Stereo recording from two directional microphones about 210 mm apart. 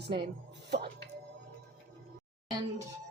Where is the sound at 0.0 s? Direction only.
50° right (ahead or behind).